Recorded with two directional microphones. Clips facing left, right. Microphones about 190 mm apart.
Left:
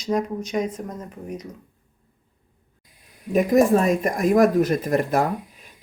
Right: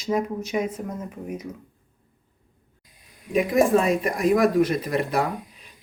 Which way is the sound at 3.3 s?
45° left (ahead or behind).